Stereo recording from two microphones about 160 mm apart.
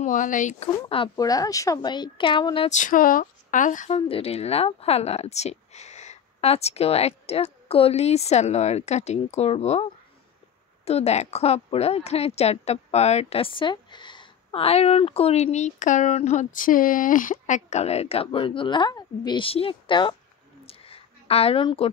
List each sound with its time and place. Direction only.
0.0 s speech: 55° left (ahead or behind)
0.8 s speech: 35° left (ahead or behind)
1.1 s speech: 20° left (ahead or behind)
2.7 s speech: 55° left (ahead or behind)
4.1 s a woman's voice: 40° left (ahead or behind)
10.9 s a woman's voice: 40° left (ahead or behind)
20.6 s a sound: 35° left (ahead or behind)